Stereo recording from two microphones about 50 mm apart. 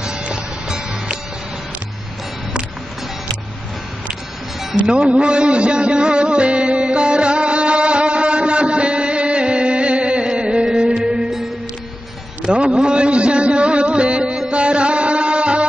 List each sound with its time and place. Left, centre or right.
0.0 s music: centre
4.7 s music: right
12.4 s a sound: centre
14.5 s music: right